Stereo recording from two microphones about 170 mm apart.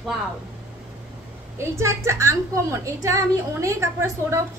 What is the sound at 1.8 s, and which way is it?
A woman's voice, 15° right (ahead or behind).